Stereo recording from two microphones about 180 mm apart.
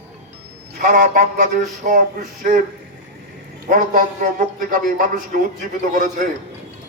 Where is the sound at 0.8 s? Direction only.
45° right (ahead or behind).